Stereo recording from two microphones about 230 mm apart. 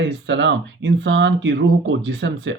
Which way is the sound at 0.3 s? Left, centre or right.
Right.